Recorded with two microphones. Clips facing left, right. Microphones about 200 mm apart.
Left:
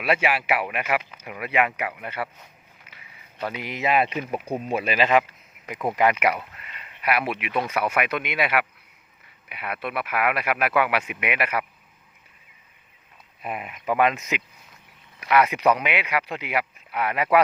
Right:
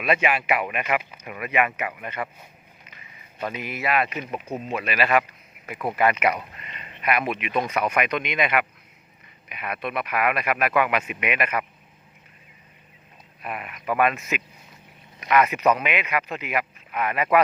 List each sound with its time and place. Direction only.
0.0 s speech: 5° left (ahead or behind)
3.7 s speech: 20° left (ahead or behind)
13.4 s speech: 20° left (ahead or behind)